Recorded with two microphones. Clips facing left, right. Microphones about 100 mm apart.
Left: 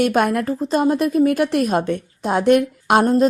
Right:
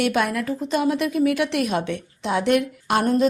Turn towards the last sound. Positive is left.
turn(degrees=50)  # may be behind; listen again after turning